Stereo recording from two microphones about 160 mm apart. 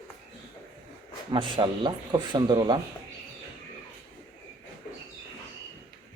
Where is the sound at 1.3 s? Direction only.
30° right (ahead or behind).